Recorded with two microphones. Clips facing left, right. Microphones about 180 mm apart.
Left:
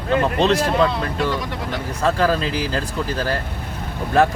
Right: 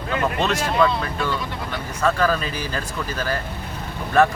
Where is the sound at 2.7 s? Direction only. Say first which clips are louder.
Left 4 dB; 35° left (ahead or behind).